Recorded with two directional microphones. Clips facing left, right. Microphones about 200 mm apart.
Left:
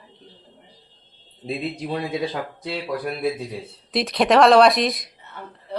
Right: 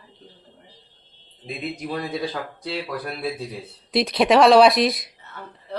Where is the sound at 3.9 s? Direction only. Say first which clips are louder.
Even; centre (ahead or behind).